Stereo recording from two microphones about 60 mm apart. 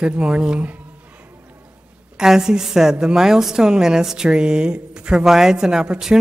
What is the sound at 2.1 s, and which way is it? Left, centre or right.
A woman's voice, centre.